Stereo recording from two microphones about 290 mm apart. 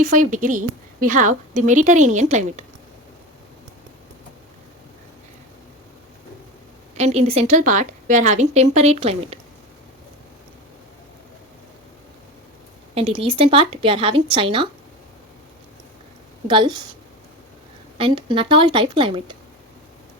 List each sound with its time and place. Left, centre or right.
0.0 s a woman's voice: right
6.9 s a woman's voice: right
12.9 s a woman's voice: right
16.5 s a woman's voice: centre
17.9 s a woman's voice: centre